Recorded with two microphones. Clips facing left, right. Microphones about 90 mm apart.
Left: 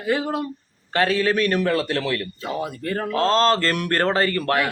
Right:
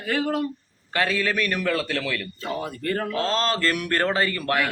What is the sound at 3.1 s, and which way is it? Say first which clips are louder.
Speech: left 9 dB; 35° left (ahead or behind).